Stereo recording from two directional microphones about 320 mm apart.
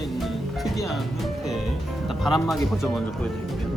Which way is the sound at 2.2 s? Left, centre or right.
Centre.